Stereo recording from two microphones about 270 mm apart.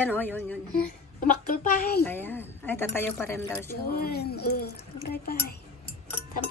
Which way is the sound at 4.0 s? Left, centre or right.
Left.